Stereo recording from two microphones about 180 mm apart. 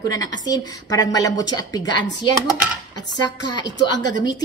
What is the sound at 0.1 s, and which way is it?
A woman's voice, 20° left (ahead or behind).